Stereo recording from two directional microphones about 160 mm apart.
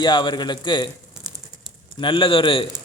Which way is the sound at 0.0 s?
30° left (ahead or behind).